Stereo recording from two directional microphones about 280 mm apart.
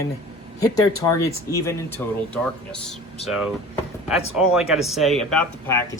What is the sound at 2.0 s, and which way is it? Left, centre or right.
Speech, centre.